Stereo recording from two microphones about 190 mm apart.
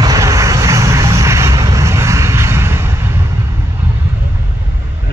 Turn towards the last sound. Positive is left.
turn(degrees=-15)  # may be behind; listen again after turning